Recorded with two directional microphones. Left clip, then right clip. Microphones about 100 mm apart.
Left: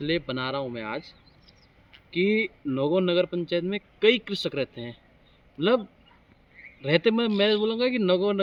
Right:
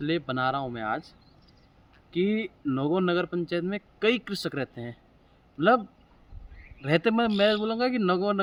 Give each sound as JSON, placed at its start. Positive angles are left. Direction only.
{"t": 0.0, "sound": "speech", "side_deg": -45}
{"t": 2.1, "sound": "speech", "side_deg": -40}
{"t": 6.8, "sound": "a man's voice", "side_deg": -45}